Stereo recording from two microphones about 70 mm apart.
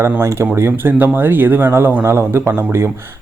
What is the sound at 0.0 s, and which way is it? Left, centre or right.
Speech, right.